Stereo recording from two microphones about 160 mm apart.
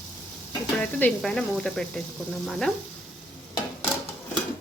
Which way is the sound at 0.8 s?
10° left (ahead or behind).